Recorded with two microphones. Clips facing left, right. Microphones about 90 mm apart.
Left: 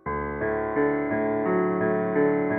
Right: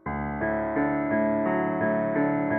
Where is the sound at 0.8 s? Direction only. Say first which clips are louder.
Left 1 dB; centre (ahead or behind).